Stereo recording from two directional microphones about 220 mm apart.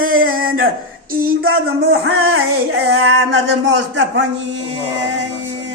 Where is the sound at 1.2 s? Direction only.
40° right (ahead or behind).